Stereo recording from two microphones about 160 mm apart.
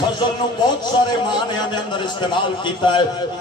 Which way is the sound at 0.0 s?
30° left (ahead or behind).